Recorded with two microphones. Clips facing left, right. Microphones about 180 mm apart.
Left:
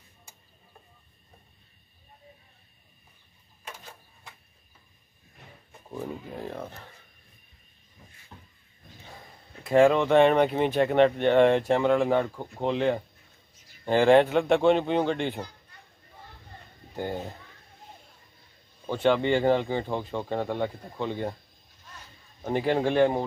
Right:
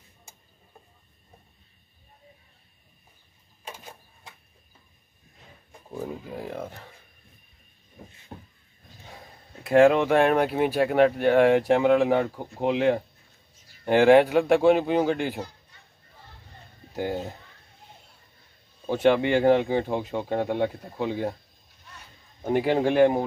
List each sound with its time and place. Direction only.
5.9 s speech: 10° right (ahead or behind)
8.3 s vehicle: 45° right (ahead or behind)
9.7 s speech: 5° right (ahead or behind)
16.9 s speech: 5° right (ahead or behind)
18.9 s speech: 10° right (ahead or behind)
22.4 s speech: 10° right (ahead or behind)